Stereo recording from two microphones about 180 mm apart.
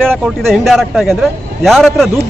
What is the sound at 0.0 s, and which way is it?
Speech, centre (ahead or behind).